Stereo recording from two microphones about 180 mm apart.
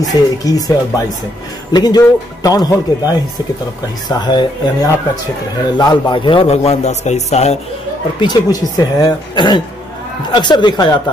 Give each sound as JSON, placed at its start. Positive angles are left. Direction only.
{"t": 0.0, "sound": "a man's voice", "side_deg": 20}
{"t": 8.2, "sound": "a man's voice", "side_deg": 25}